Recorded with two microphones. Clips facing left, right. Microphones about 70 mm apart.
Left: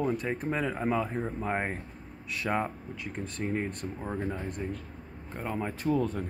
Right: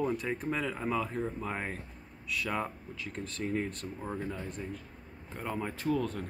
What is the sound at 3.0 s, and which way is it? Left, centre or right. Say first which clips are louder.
Speech: left 1 dB; centre.